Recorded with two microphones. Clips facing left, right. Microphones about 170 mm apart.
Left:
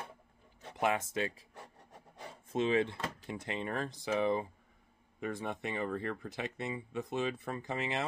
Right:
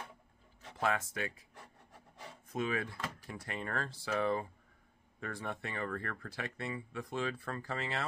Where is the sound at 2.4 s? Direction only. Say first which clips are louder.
Left 6 dB; 25° left (ahead or behind).